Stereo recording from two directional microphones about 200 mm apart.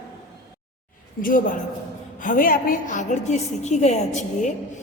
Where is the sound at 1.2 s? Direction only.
45° left (ahead or behind).